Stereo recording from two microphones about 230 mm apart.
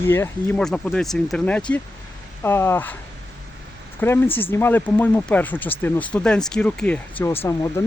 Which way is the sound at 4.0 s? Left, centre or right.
Centre.